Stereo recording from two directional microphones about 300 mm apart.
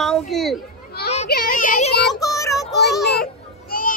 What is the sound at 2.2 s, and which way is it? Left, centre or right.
Child singing, centre.